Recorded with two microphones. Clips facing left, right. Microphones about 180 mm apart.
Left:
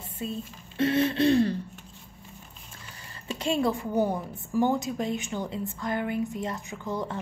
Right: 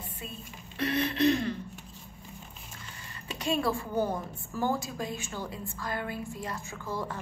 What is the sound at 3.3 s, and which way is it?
A woman's voice, 25° left (ahead or behind).